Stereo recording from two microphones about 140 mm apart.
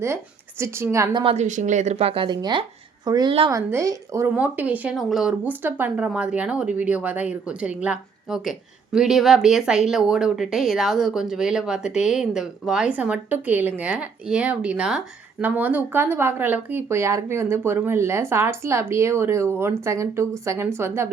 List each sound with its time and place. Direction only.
0.6 s a woman's voice: 20° right (ahead or behind)
1.1 s speech: 40° right (ahead or behind)
1.4 s a woman's voice: 60° right (ahead or behind); by 4.3 s 20° right (ahead or behind)
4.4 s a woman's voice: 10° right (ahead or behind)